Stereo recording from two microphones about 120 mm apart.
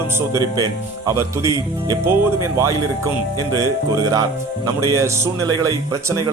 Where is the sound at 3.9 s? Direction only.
30° right (ahead or behind).